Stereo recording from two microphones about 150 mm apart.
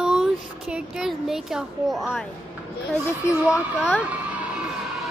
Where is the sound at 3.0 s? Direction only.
15° left (ahead or behind).